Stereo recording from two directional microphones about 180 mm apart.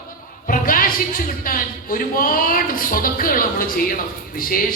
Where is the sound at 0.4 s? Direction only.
50° left (ahead or behind).